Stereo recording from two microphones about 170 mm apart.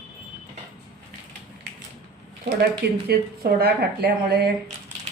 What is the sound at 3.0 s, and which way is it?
Speech, 70° right (ahead or behind).